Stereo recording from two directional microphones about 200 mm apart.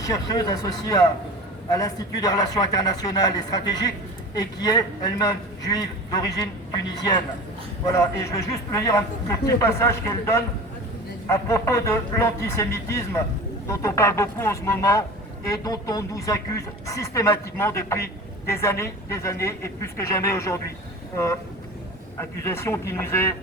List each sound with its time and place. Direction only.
0.0 s a man's voice: 15° left (ahead or behind)
22.2 s speech: 15° left (ahead or behind)